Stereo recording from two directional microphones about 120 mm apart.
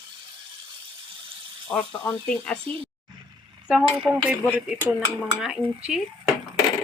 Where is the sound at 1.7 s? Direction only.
10° left (ahead or behind).